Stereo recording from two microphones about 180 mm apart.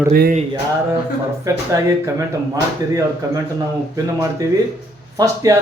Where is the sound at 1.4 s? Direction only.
15° right (ahead or behind).